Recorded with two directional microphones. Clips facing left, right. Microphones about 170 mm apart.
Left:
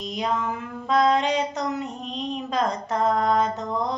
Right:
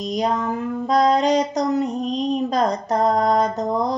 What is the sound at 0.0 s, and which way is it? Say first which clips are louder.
Female singing: right 5 dB; 40° right (ahead or behind).